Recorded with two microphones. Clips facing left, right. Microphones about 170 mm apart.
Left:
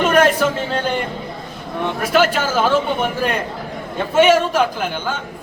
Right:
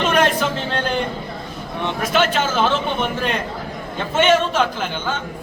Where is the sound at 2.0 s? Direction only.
5° left (ahead or behind).